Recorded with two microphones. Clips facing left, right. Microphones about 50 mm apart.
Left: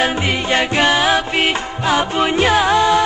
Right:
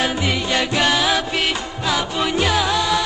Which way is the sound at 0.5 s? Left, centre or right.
Left.